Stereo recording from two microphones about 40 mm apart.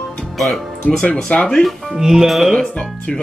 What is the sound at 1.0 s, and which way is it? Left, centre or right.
Speech, left.